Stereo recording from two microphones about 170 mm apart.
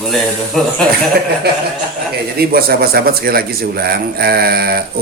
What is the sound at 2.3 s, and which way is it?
A man's voice, 65° right (ahead or behind).